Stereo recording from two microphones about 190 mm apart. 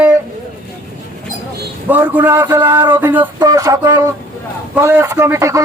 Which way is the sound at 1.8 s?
10° right (ahead or behind).